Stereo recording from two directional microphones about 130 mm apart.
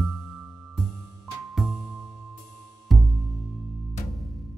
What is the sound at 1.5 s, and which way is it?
Music, centre (ahead or behind).